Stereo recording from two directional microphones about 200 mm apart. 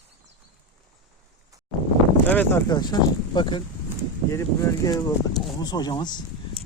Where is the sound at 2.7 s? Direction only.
20° left (ahead or behind).